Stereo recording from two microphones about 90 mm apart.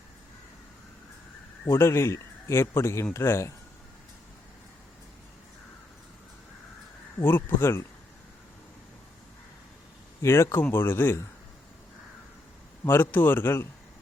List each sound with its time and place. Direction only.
1.6 s speech: 30° left (ahead or behind)
7.2 s speech: 25° left (ahead or behind)
10.2 s speech: 30° left (ahead or behind)
12.8 s speech: 25° left (ahead or behind)